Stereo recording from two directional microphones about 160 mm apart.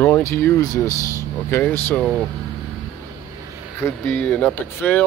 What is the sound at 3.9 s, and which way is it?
Speech, 10° left (ahead or behind).